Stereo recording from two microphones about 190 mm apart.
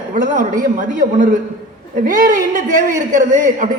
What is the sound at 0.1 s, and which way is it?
A woman's voice, 45° right (ahead or behind).